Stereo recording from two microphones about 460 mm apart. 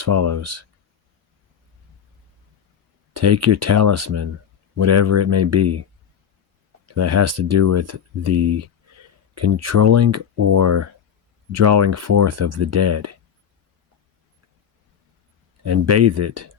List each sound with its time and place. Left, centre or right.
0.0 s speech: right
3.1 s speech: right
6.8 s speech: right
15.6 s speech: right